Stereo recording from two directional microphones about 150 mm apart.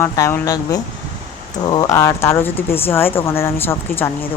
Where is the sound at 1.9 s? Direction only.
20° left (ahead or behind).